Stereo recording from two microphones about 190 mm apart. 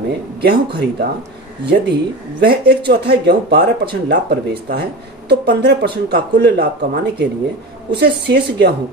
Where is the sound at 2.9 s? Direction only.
60° right (ahead or behind).